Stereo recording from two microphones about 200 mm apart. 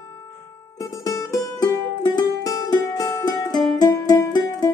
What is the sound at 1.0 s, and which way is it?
Music, 15° left (ahead or behind).